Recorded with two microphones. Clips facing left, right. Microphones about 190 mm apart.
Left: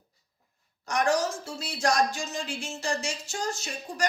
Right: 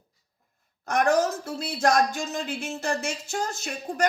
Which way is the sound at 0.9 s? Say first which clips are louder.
Right 4 dB; 55° right (ahead or behind).